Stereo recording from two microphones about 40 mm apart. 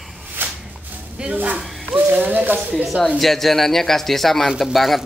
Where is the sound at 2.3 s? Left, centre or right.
Right.